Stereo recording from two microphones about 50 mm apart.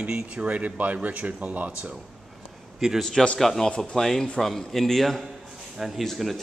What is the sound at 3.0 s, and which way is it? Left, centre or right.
A man's voice, centre.